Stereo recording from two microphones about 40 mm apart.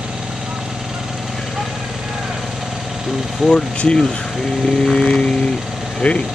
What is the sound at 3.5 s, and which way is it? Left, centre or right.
Speech, left.